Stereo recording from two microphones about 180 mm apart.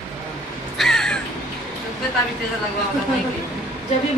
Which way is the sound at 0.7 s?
5° left (ahead or behind).